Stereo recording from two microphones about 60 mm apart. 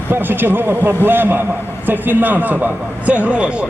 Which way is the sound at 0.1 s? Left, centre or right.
Right.